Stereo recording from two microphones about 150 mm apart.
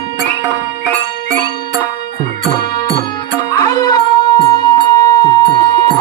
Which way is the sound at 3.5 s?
25° left (ahead or behind).